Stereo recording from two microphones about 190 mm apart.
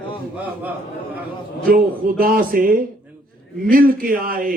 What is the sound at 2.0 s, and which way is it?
Speech, 50° right (ahead or behind).